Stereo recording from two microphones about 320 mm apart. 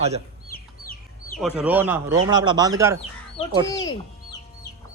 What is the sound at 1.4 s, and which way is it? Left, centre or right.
Speech, centre.